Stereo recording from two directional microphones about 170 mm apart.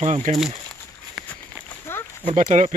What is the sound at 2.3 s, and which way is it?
Speech, 45° right (ahead or behind).